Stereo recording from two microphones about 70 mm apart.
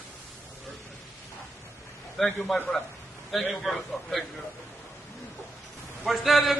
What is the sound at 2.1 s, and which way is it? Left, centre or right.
A man's voice, centre.